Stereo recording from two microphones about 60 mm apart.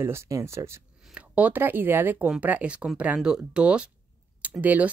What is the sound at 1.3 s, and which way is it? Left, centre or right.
Speech, right.